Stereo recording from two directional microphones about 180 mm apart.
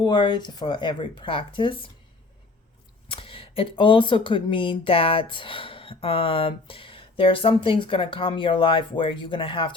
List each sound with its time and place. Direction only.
0.0 s speech: 25° left (ahead or behind)
3.1 s speech: 30° left (ahead or behind)